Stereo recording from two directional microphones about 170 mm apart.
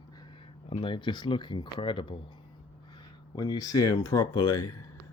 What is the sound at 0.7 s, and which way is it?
Speech, 30° left (ahead or behind).